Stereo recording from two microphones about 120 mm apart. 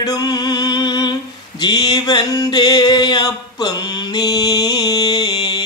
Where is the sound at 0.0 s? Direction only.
35° left (ahead or behind).